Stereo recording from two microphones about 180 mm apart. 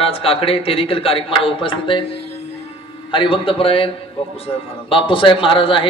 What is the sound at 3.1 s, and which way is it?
A man's voice, 30° left (ahead or behind).